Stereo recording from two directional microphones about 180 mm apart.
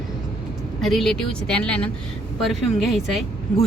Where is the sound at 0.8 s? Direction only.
Centre (ahead or behind).